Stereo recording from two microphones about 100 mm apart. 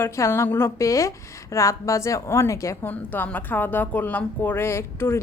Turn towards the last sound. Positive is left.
turn(degrees=25)  # may be behind; listen again after turning